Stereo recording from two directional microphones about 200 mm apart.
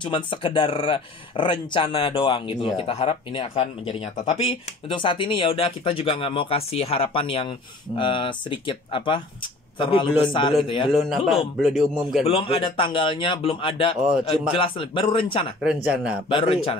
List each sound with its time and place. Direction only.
0.0 s speech: 25° left (ahead or behind)
10.9 s a man's voice: centre (ahead or behind)
12.3 s speech: 30° left (ahead or behind)
15.6 s a man's voice: 5° right (ahead or behind)
16.3 s speech: 25° left (ahead or behind)